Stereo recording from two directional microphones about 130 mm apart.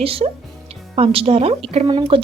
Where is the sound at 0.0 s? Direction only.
45° right (ahead or behind).